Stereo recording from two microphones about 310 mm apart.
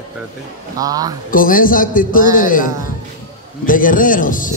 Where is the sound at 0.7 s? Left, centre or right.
Centre.